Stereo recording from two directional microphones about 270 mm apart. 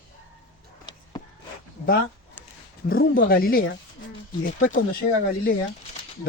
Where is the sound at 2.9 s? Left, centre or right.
Left.